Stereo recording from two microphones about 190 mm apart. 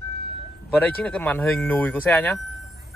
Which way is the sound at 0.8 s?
5° left (ahead or behind).